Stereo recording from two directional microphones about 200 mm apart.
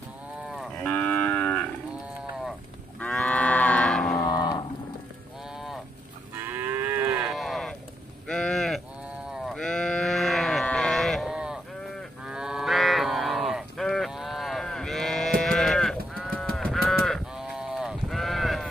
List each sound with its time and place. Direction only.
0.5 s moo: centre (ahead or behind)
3.0 s livestock: 5° left (ahead or behind)
4.1 s cattle: 15° left (ahead or behind)
6.4 s moo: 10° right (ahead or behind)
8.3 s sheep: 5° left (ahead or behind)
16.2 s livestock: centre (ahead or behind)